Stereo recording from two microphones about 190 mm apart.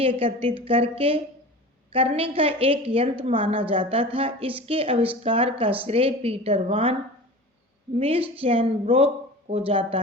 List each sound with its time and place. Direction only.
0.0 s a woman's voice: 30° right (ahead or behind)
7.9 s a woman's voice: 30° right (ahead or behind)